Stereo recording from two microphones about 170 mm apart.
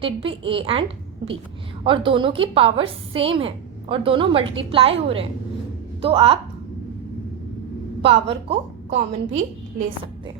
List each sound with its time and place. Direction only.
0.0 s a woman's voice: 30° right (ahead or behind)
8.0 s a woman's voice: 35° right (ahead or behind)